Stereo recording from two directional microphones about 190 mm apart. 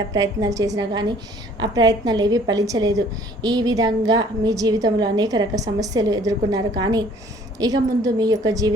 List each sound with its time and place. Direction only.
0.1 s a woman's voice: 15° right (ahead or behind)